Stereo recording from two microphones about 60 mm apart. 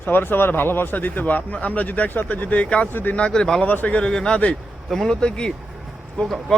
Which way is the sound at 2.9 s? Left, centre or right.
Left.